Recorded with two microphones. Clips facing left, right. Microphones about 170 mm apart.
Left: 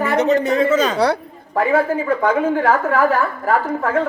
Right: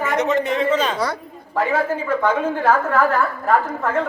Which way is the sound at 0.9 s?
70° left (ahead or behind).